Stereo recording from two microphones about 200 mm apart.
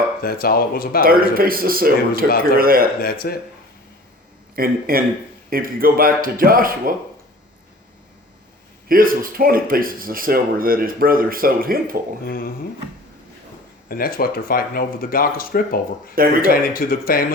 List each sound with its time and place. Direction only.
0.2 s speech: 50° left (ahead or behind)
1.0 s speech: 45° right (ahead or behind)
3.0 s speech: 50° left (ahead or behind)
4.5 s speech: 45° right (ahead or behind)
8.9 s speech: 45° right (ahead or behind)
12.2 s speech: 45° left (ahead or behind)
13.8 s speech: 45° left (ahead or behind)
16.1 s speech: 45° right (ahead or behind)
16.4 s speech: 45° left (ahead or behind)